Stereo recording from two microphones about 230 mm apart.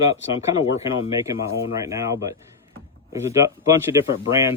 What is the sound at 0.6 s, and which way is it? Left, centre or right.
Speech, left.